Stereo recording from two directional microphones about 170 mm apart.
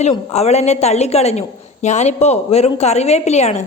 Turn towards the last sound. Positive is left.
turn(degrees=40)  # may be behind; listen again after turning